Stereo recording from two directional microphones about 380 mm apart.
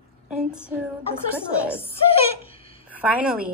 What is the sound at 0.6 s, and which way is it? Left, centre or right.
A woman's voice, centre.